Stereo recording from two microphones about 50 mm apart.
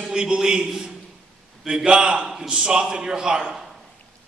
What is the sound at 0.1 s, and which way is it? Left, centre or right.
A man's voice, centre.